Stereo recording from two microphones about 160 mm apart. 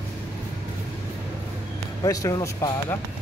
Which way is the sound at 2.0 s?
20° left (ahead or behind).